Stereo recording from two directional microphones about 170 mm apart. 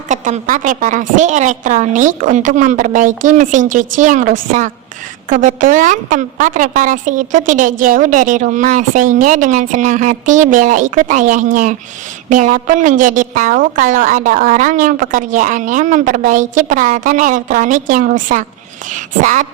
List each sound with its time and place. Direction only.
0.1 s a woman's voice: 45° right (ahead or behind)